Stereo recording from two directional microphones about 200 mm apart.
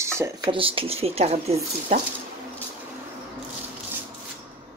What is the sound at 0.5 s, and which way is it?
Speech, 25° right (ahead or behind).